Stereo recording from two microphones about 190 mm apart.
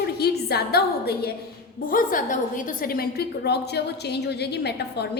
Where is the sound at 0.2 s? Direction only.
55° left (ahead or behind).